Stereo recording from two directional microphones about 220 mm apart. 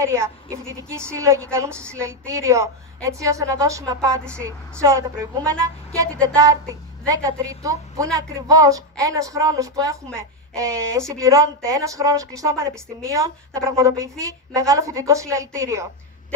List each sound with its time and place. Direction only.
0.0 s a woman's voice: 15° right (ahead or behind)